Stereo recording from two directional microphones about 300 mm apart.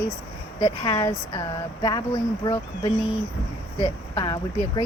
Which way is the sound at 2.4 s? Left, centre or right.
Centre.